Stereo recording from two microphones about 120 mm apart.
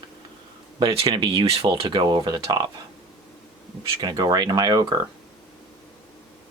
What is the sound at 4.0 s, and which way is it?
Speech, 35° right (ahead or behind).